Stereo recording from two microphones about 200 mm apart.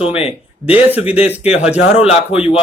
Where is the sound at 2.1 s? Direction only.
30° left (ahead or behind).